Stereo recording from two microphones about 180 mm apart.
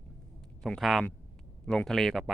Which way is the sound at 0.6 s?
Centre (ahead or behind).